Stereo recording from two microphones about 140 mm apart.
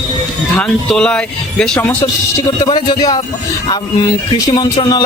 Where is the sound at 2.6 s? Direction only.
35° left (ahead or behind).